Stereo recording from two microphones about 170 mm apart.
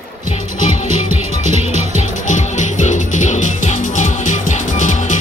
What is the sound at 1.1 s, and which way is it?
Music, 40° right (ahead or behind).